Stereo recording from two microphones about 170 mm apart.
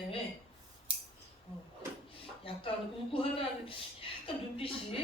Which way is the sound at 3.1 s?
30° left (ahead or behind).